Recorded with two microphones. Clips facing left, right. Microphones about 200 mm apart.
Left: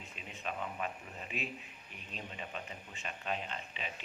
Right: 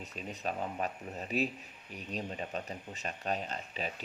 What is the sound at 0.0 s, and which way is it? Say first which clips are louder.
Speech: right 6 dB; 40° right (ahead or behind).